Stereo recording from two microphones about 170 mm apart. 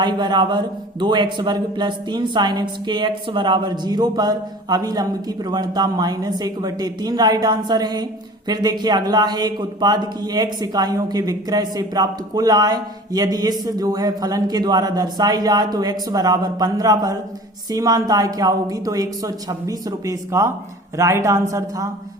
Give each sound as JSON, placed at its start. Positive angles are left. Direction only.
{"t": 0.0, "sound": "a man's voice", "side_deg": -25}